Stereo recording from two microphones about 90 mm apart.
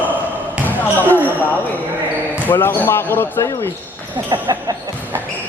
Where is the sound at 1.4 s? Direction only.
20° left (ahead or behind).